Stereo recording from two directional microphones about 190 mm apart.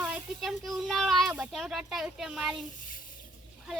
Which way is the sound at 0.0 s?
5° right (ahead or behind).